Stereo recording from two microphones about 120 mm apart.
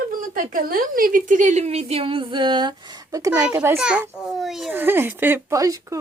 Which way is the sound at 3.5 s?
20° right (ahead or behind).